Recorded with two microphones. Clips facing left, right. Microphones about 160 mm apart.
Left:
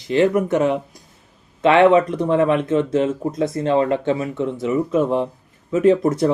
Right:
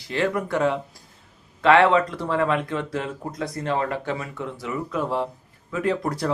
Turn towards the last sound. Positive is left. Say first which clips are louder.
# left 9 dB
turn(degrees=20)  # may be behind; listen again after turning